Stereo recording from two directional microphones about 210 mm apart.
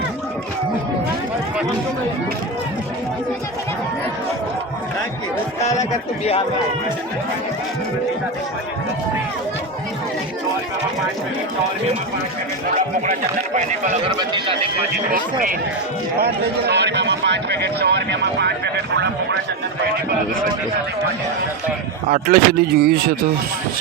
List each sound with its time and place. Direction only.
5.5 s speech: 30° left (ahead or behind)
13.1 s speech: 35° right (ahead or behind)
15.1 s speech: 40° right (ahead or behind)
16.2 s speech: 50° right (ahead or behind)
22.1 s speech: 45° right (ahead or behind)